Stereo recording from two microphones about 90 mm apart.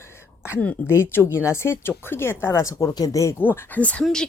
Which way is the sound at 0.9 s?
30° left (ahead or behind).